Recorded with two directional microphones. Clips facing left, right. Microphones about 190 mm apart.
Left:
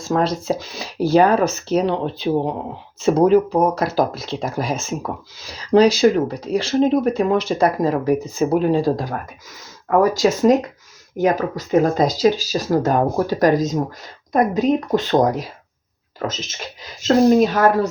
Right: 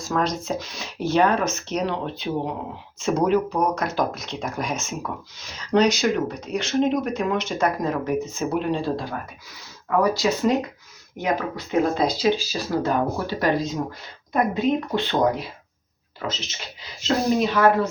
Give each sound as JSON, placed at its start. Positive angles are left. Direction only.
{"t": 0.0, "sound": "speech", "side_deg": 30}
{"t": 3.8, "sound": "speech", "side_deg": 30}